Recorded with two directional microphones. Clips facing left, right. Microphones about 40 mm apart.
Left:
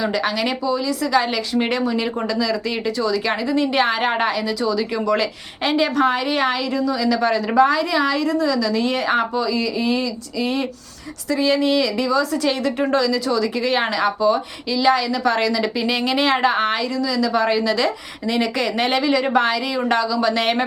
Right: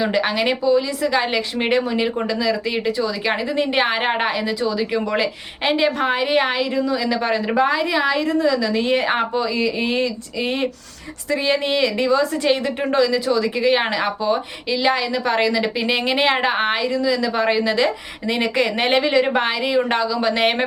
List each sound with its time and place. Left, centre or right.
0.0 s a woman's voice: right